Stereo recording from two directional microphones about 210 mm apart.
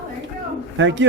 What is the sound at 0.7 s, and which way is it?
Speech, 60° right (ahead or behind).